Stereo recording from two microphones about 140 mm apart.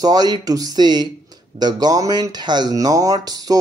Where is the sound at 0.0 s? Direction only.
30° right (ahead or behind).